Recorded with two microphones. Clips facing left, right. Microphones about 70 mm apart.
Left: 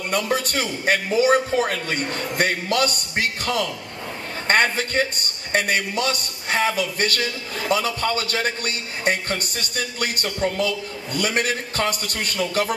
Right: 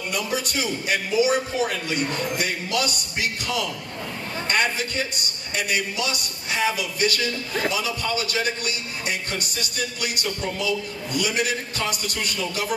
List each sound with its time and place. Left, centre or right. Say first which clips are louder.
0.3 s a man's voice: left 3 dB; left